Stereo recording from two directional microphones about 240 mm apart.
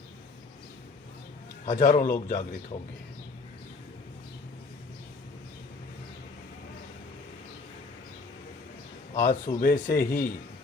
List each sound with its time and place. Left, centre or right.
1.6 s speech: left
9.1 s a man's voice: left